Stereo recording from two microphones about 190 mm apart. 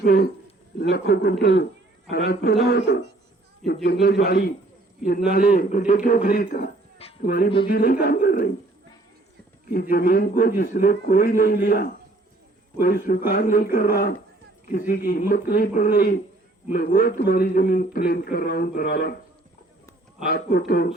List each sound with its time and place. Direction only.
0.0 s a man's voice: 55° left (ahead or behind)
3.6 s a man's voice: centre (ahead or behind)
4.3 s a man's voice: 50° left (ahead or behind)
9.6 s a man's voice: 50° left (ahead or behind)
20.2 s a man's voice: 55° left (ahead or behind)